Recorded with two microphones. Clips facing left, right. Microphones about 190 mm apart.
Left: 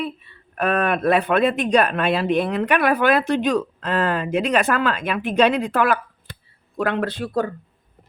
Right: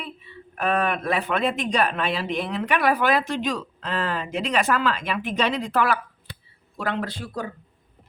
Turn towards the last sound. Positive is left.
turn(degrees=60)  # may be behind; listen again after turning